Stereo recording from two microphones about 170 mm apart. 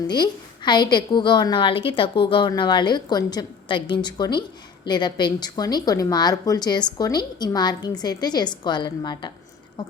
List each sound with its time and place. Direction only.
0.1 s a woman's voice: 25° left (ahead or behind)